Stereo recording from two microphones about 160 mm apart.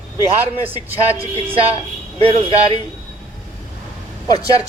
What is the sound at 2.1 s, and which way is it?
Speech, 35° right (ahead or behind).